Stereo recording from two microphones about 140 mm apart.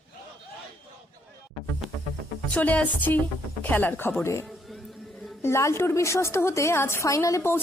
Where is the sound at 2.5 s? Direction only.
10° left (ahead or behind).